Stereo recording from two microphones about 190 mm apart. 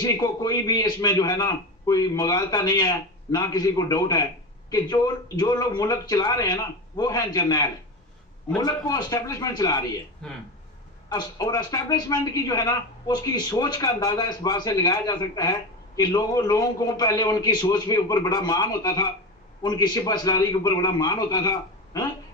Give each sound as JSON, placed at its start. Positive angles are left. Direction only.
{"t": 0.0, "sound": "a man's voice", "side_deg": 20}
{"t": 10.2, "sound": "speech", "side_deg": 0}
{"t": 11.1, "sound": "a man's voice", "side_deg": 20}